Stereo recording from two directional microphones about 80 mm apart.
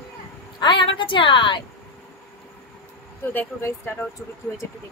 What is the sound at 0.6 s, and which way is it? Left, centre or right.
A woman's voice, left.